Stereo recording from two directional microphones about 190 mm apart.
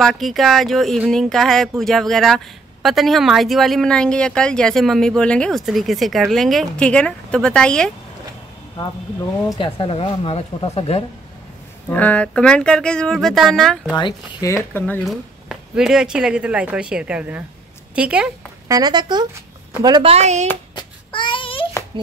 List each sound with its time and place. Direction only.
0.0 s speech: centre (ahead or behind)
9.6 s speech: 30° left (ahead or behind)
11.9 s speech: 10° left (ahead or behind)
13.9 s speech: 20° left (ahead or behind)
15.0 s a woman's voice: 5° right (ahead or behind)
18.7 s a woman's voice: 20° right (ahead or behind)
20.7 s child singing: 25° left (ahead or behind)